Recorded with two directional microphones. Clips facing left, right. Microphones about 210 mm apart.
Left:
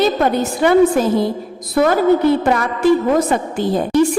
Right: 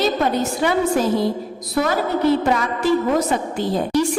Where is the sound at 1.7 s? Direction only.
50° left (ahead or behind).